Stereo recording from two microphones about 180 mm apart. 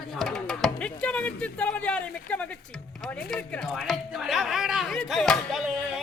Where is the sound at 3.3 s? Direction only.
5° left (ahead or behind).